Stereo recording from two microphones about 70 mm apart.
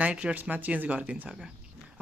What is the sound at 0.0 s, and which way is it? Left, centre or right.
Speech, centre.